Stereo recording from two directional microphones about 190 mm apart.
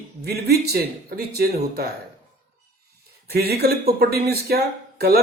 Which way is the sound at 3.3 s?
55° right (ahead or behind).